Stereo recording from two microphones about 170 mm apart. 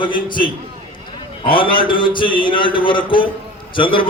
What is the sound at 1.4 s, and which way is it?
A man's voice, 30° left (ahead or behind).